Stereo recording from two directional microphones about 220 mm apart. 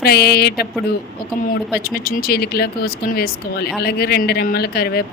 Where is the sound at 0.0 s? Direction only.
45° left (ahead or behind).